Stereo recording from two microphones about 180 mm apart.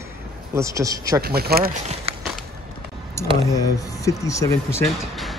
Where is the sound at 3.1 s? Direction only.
20° left (ahead or behind).